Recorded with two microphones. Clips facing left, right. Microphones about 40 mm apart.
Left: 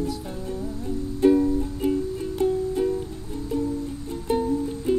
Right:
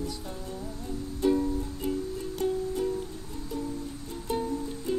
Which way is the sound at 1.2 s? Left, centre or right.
Left.